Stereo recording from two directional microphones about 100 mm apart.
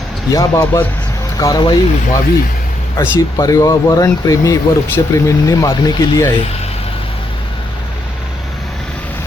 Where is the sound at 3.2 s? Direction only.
35° left (ahead or behind).